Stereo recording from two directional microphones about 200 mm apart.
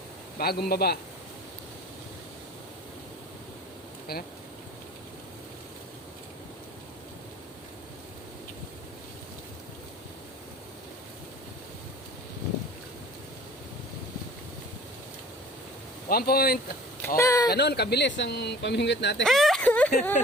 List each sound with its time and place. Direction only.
0.3 s a man's voice: 50° left (ahead or behind)
4.1 s a man's voice: 50° left (ahead or behind)
16.0 s a man's voice: 50° left (ahead or behind)
17.2 s a sound: 15° left (ahead or behind)
17.5 s speech: 55° left (ahead or behind)
19.2 s a sound: centre (ahead or behind)